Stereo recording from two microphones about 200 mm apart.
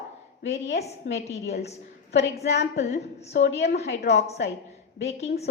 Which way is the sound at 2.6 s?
35° left (ahead or behind).